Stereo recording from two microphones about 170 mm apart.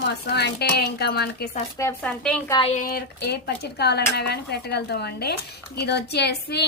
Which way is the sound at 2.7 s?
60° left (ahead or behind).